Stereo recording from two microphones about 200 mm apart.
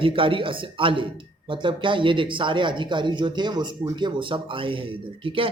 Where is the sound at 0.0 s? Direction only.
25° right (ahead or behind).